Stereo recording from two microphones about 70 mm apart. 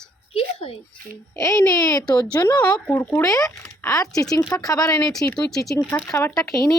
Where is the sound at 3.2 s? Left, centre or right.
Left.